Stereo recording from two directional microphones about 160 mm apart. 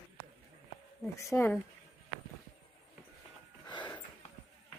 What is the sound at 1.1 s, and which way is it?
Speech, 15° left (ahead or behind).